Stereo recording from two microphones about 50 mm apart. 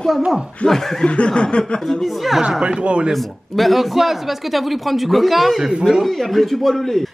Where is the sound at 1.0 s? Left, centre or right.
Left.